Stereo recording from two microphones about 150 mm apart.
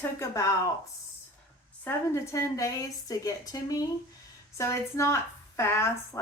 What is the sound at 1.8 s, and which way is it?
A woman's voice, 20° left (ahead or behind).